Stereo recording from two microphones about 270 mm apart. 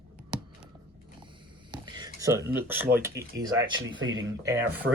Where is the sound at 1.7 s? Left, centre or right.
Centre.